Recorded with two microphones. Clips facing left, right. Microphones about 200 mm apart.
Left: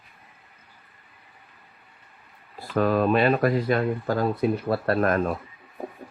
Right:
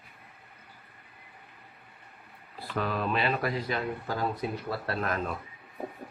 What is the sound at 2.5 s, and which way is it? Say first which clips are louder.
Speech: left 9 dB; 45° left (ahead or behind).